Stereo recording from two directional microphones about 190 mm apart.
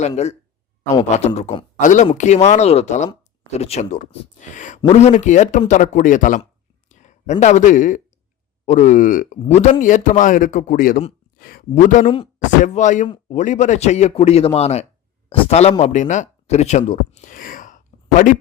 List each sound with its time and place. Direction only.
1.4 s speech: 35° left (ahead or behind)
6.4 s a sound: 40° left (ahead or behind)
8.6 s a man's voice: 40° left (ahead or behind)